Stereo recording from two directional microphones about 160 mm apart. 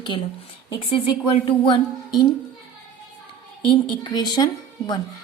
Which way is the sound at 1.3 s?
35° left (ahead or behind).